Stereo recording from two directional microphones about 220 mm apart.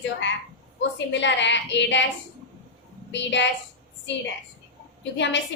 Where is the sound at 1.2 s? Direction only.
55° left (ahead or behind).